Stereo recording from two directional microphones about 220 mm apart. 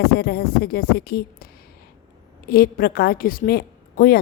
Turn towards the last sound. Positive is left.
turn(degrees=40)  # may be behind; listen again after turning